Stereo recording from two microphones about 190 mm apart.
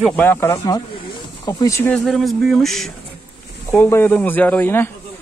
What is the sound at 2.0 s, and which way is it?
Speech, centre (ahead or behind).